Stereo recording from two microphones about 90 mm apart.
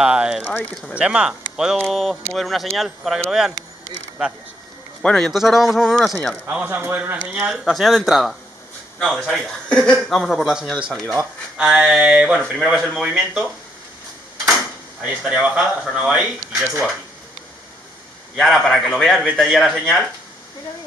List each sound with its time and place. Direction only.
0.0 s speech: 10° right (ahead or behind)
1.8 s speech: centre (ahead or behind)
5.0 s a man's voice: 10° left (ahead or behind)
5.3 s speech: 5° right (ahead or behind)
6.4 s speech: 20° right (ahead or behind)
7.5 s a man's voice: centre (ahead or behind)
11.5 s speech: 10° right (ahead or behind)
12.4 s speech: centre (ahead or behind)
15.0 s speech: 10° right (ahead or behind)
18.4 s a man's voice: centre (ahead or behind)